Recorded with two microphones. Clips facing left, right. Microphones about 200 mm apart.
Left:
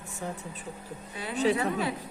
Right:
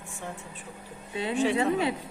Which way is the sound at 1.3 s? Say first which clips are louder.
Even; 40° left (ahead or behind).